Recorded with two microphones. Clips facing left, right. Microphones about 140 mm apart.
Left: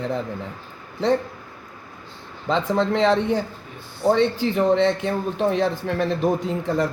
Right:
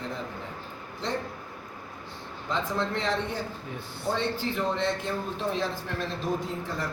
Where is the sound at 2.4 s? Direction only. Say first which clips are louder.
Left 9 dB; 90° left; by 6.9 s 70° left (ahead or behind).